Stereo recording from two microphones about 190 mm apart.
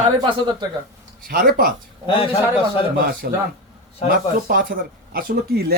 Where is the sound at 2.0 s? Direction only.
25° left (ahead or behind).